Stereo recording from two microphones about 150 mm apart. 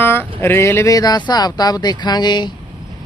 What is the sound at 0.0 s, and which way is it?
Speech, 15° left (ahead or behind).